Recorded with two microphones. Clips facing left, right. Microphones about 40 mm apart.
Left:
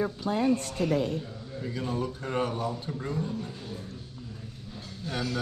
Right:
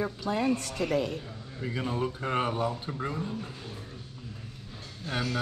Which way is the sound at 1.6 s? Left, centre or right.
Right.